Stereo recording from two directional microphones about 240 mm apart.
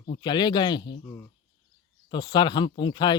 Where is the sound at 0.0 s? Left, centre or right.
Centre.